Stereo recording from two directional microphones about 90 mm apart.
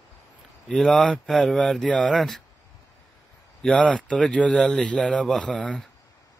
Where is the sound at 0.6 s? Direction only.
5° left (ahead or behind).